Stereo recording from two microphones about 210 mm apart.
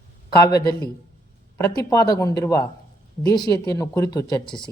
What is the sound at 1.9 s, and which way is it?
Speech, 15° left (ahead or behind).